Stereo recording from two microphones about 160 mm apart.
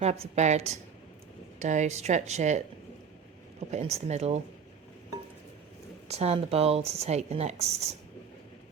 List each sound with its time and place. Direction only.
0.0 s speech: 45° right (ahead or behind)
3.7 s speech: 40° right (ahead or behind)
6.1 s speech: 40° right (ahead or behind)